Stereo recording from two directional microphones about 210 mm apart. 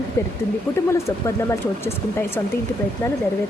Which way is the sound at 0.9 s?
15° left (ahead or behind).